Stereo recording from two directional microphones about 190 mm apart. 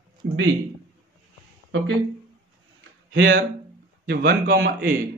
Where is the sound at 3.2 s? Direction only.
50° right (ahead or behind).